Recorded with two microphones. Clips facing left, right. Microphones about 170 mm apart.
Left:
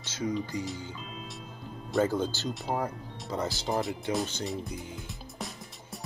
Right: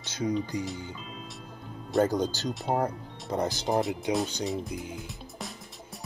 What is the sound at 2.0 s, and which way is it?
Speech, 40° right (ahead or behind).